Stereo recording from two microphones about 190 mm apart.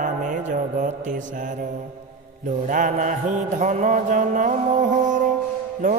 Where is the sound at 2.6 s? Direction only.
45° right (ahead or behind).